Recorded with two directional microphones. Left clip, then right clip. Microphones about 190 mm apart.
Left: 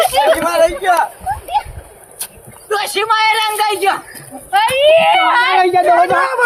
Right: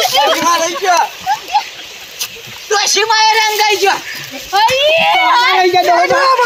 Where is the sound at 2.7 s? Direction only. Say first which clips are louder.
Right 3 dB; 35° left (ahead or behind).